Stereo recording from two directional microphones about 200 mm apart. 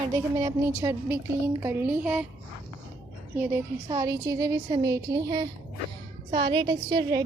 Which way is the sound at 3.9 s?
20° right (ahead or behind).